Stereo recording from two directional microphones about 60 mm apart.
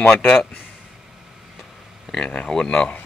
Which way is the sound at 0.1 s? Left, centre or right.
Centre.